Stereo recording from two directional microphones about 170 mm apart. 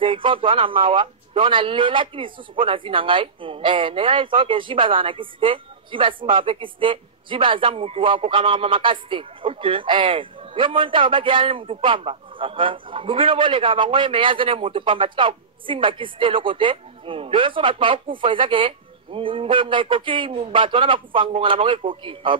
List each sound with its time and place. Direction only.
0.0 s speech: 30° right (ahead or behind)